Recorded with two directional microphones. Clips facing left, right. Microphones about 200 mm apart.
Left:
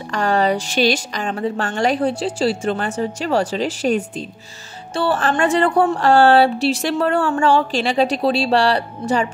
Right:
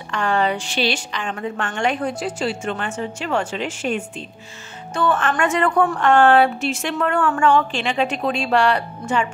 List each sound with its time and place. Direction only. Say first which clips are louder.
0.1 s speech: left 3 dB; 40° left (ahead or behind)